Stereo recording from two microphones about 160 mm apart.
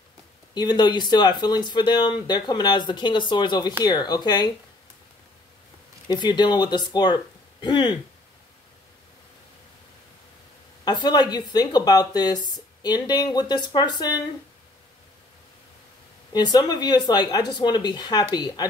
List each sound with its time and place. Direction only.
0.6 s speech: 25° left (ahead or behind)
6.0 s speech: 25° left (ahead or behind)
10.9 s speech: 25° left (ahead or behind)
16.3 s speech: 25° left (ahead or behind)